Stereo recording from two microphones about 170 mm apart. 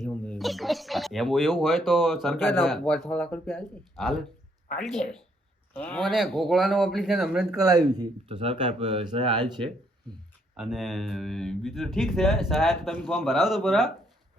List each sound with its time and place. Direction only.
0.1 s speech: 5° left (ahead or behind)
3.9 s speech: centre (ahead or behind)
7.6 s speech: 20° right (ahead or behind)
10.6 s speech: centre (ahead or behind)